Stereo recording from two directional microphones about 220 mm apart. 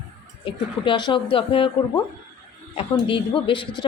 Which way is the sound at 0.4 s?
20° left (ahead or behind).